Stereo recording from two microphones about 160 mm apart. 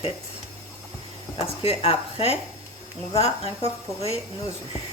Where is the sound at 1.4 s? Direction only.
40° left (ahead or behind).